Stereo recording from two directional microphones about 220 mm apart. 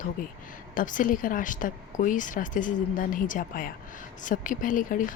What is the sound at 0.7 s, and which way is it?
Speech, 35° left (ahead or behind).